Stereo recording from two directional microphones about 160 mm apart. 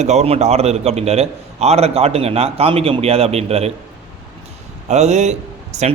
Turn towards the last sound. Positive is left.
turn(degrees=-45)  # may be behind; listen again after turning